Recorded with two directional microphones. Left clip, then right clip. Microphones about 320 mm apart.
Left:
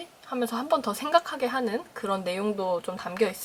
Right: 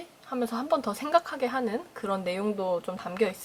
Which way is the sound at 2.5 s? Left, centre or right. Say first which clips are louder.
Left 1 dB; centre.